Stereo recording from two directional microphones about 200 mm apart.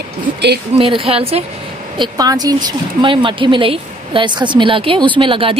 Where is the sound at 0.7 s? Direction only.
30° right (ahead or behind).